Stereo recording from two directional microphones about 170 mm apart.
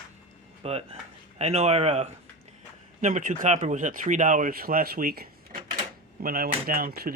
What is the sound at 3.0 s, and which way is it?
Speech, 50° right (ahead or behind).